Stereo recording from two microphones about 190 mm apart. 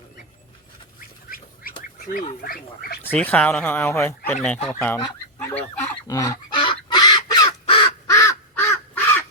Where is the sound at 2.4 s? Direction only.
50° left (ahead or behind).